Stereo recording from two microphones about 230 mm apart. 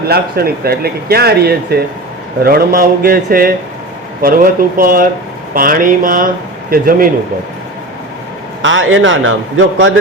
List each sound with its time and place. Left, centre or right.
0.1 s speech: right
8.6 s a man's voice: right